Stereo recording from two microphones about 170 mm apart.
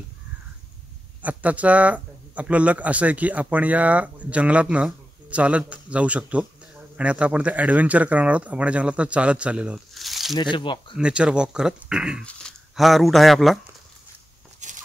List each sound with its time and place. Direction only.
1.2 s speech: 10° right (ahead or behind)
10.3 s speech: 25° left (ahead or behind)
11.0 s speech: 5° right (ahead or behind)
14.6 s a sound: 45° right (ahead or behind)